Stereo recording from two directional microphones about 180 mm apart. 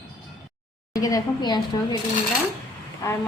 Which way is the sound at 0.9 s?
20° left (ahead or behind).